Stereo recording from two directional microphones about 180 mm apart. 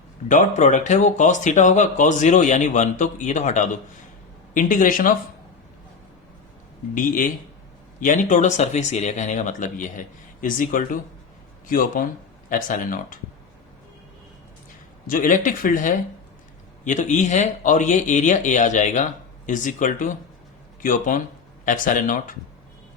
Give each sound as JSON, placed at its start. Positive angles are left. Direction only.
{"t": 0.3, "sound": "speech", "side_deg": 40}
{"t": 6.9, "sound": "speech", "side_deg": 45}
{"t": 15.0, "sound": "speech", "side_deg": 50}